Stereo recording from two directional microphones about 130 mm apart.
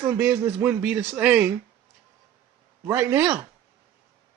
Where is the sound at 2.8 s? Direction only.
20° right (ahead or behind).